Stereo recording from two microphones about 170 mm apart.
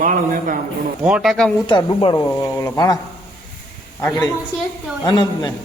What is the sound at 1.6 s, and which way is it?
Speech, 30° left (ahead or behind).